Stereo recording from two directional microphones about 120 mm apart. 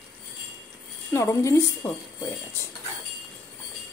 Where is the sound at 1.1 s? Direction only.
25° left (ahead or behind).